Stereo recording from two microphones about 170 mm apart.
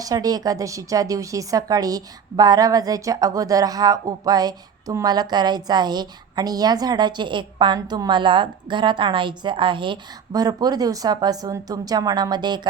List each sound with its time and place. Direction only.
0.0 s a woman's voice: 20° right (ahead or behind)